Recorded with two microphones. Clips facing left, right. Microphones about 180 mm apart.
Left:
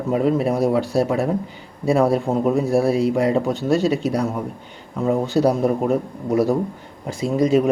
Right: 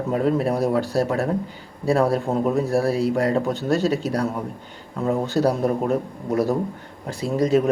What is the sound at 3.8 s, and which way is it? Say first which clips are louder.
Speech: left 2 dB; 35° right (ahead or behind).